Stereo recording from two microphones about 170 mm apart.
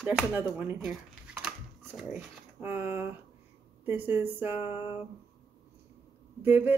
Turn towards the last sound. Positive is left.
turn(degrees=-10)  # may be behind; listen again after turning